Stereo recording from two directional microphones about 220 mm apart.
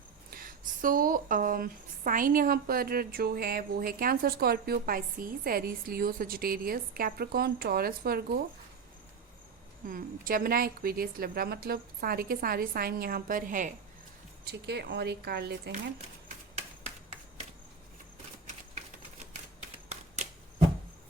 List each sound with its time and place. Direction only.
0.3 s speech: 40° right (ahead or behind)
9.9 s a woman's voice: 40° right (ahead or behind)
14.4 s a woman's voice: 50° right (ahead or behind)
19.5 s typewriter: 30° right (ahead or behind)